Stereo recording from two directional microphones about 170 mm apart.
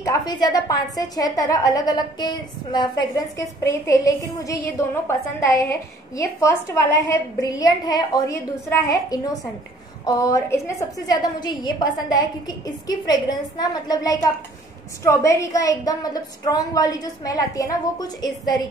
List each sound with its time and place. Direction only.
0.0 s a woman's voice: 20° left (ahead or behind)